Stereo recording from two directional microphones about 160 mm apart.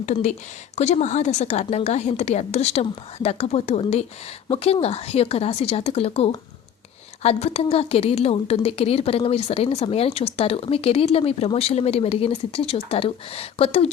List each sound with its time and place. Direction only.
0.0 s a woman's voice: 45° left (ahead or behind)